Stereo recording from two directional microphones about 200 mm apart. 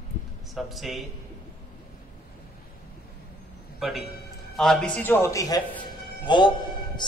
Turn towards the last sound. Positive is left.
turn(degrees=25)  # may be behind; listen again after turning